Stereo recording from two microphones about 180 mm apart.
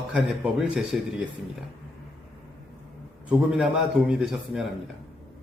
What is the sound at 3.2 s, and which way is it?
Speech, 5° right (ahead or behind).